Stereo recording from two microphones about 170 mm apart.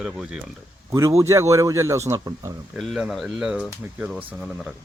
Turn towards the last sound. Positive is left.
turn(degrees=-5)  # may be behind; listen again after turning